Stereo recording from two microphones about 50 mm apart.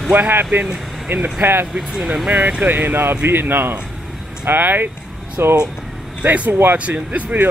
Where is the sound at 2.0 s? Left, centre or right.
Centre.